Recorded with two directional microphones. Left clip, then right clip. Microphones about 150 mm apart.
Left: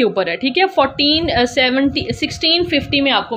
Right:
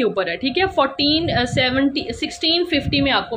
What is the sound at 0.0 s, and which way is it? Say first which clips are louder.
A woman's voice: left 4 dB; 25° left (ahead or behind).